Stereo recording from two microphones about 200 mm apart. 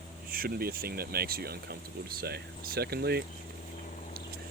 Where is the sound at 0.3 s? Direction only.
50° right (ahead or behind).